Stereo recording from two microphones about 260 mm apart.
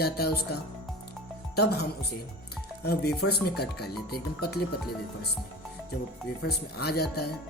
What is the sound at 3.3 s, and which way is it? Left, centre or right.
Speech, left.